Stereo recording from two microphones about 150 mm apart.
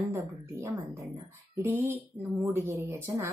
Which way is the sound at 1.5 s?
15° right (ahead or behind).